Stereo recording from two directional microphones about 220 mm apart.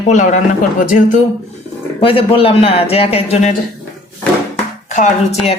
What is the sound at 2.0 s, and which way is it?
A man's voice, 25° left (ahead or behind).